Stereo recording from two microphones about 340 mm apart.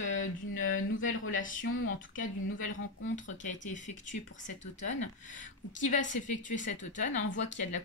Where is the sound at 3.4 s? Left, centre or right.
Left.